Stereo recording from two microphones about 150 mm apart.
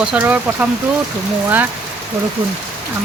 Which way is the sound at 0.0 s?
10° right (ahead or behind).